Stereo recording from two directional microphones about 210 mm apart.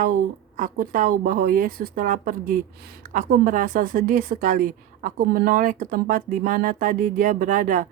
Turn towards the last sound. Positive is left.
turn(degrees=-40)  # may be behind; listen again after turning